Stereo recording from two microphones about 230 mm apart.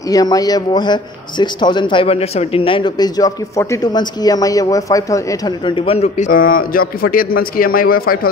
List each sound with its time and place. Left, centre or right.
0.1 s a man's voice: centre; by 8.3 s left